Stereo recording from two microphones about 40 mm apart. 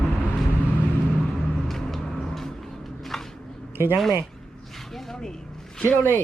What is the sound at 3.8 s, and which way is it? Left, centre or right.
Speech, right.